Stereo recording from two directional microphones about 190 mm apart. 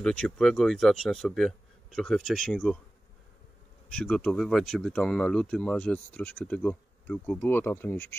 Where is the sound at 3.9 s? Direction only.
5° left (ahead or behind).